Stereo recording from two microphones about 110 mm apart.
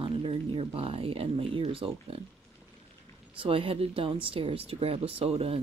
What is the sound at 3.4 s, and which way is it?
Speech, 55° right (ahead or behind).